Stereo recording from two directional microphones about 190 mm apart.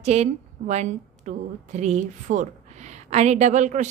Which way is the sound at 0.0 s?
35° right (ahead or behind).